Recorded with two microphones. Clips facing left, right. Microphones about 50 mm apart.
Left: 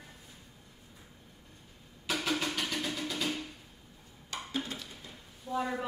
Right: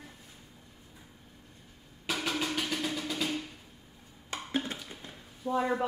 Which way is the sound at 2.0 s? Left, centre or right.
Centre.